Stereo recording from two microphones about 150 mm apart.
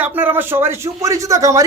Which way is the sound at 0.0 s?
10° right (ahead or behind).